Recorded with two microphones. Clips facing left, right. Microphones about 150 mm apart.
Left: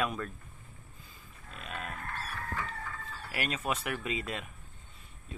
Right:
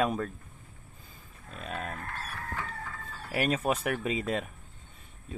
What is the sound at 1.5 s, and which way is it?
Pig, 35° right (ahead or behind).